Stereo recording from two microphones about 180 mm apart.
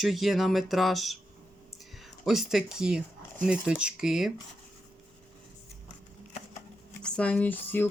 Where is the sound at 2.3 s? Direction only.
Centre (ahead or behind).